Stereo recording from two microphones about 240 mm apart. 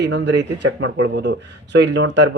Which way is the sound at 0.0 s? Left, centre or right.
Right.